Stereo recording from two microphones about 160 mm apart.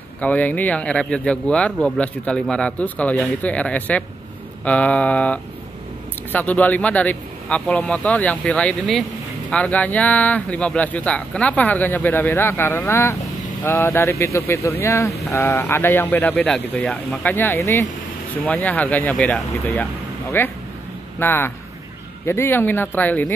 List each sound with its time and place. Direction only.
0.2 s speech: 10° left (ahead or behind)